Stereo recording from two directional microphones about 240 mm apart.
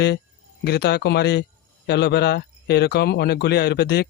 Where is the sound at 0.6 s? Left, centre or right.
Left.